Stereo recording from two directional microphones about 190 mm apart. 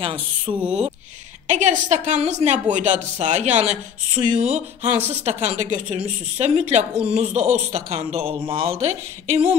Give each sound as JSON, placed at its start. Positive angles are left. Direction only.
{"t": 0.0, "sound": "a woman's voice", "side_deg": -30}